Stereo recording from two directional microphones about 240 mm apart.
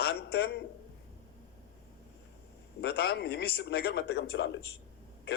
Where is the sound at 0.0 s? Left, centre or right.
Left.